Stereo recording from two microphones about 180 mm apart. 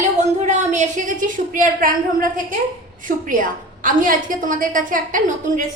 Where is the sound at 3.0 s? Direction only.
50° right (ahead or behind).